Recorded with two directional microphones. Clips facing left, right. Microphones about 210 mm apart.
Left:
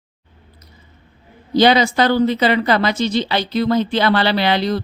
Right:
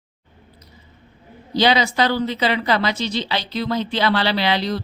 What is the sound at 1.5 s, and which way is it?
A woman's voice, 50° left (ahead or behind).